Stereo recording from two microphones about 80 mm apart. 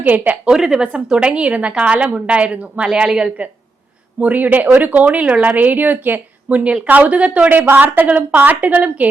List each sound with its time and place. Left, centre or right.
0.0 s a woman's voice: centre
0.5 s speech: centre
0.8 s a woman's voice: centre
3.1 s speech: centre
4.2 s a woman's voice: right